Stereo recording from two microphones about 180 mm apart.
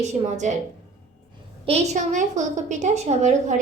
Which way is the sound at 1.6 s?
35° right (ahead or behind).